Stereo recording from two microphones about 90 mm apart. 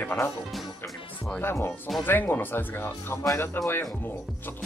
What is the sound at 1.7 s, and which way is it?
Speech, centre (ahead or behind).